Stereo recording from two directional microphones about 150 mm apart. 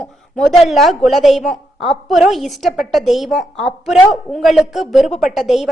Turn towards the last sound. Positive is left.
turn(degrees=0)  # may be behind; listen again after turning